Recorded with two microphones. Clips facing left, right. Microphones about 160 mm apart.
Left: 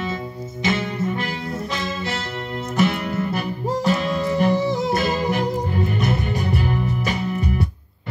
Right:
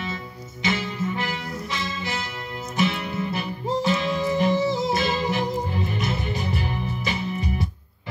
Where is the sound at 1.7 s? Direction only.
65° left (ahead or behind).